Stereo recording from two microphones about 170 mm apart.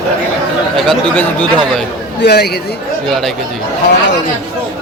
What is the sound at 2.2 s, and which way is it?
Speech, 70° left (ahead or behind).